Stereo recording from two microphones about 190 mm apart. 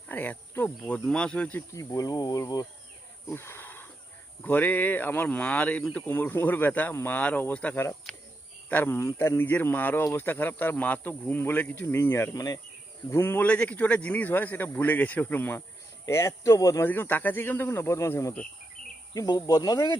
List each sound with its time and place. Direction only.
0.1 s insect: 10° left (ahead or behind)
0.8 s speech: 5° left (ahead or behind)
1.7 s speech: 20° left (ahead or behind)
3.2 s a sound: 15° left (ahead or behind)
4.4 s speech: 10° left (ahead or behind)